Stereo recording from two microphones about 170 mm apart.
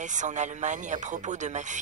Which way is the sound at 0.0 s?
45° right (ahead or behind).